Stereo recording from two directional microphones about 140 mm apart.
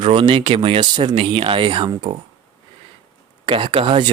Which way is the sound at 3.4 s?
40° right (ahead or behind).